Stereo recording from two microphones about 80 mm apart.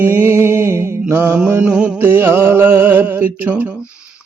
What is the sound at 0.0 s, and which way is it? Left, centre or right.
Mantra, right.